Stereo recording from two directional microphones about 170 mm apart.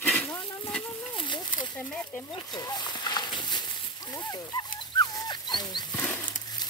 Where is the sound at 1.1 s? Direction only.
25° left (ahead or behind).